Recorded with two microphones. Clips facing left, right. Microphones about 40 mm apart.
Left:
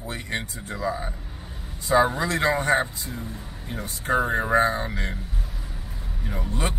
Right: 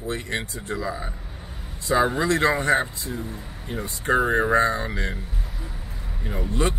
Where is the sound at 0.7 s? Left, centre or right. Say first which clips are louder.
Left 2 dB; centre.